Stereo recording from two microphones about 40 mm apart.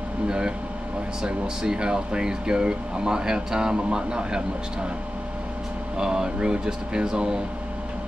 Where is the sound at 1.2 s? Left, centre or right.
Centre.